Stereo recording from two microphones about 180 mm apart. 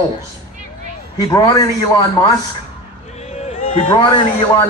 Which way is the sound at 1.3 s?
20° left (ahead or behind).